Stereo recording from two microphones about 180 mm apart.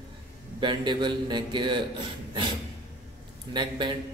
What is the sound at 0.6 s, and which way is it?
A man's voice, 25° right (ahead or behind).